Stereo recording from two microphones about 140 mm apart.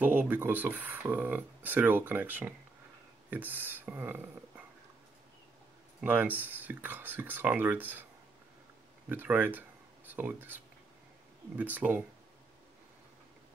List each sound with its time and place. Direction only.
0.0 s speech: 10° right (ahead or behind)
5.9 s speech: 10° right (ahead or behind)
9.1 s speech: 15° right (ahead or behind)